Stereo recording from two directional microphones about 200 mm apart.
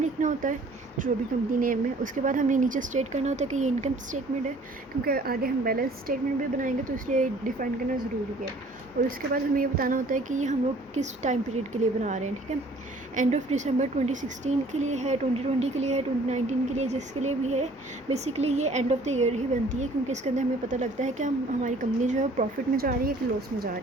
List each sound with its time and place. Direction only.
0.0 s speech: 40° right (ahead or behind)
5.0 s speech: 50° right (ahead or behind)